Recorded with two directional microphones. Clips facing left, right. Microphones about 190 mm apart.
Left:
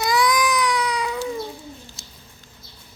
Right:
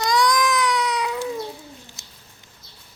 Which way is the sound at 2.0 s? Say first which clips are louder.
Left 4 dB; 20° right (ahead or behind).